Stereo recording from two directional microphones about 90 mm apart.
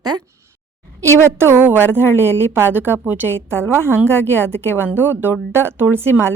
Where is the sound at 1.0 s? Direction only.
30° right (ahead or behind).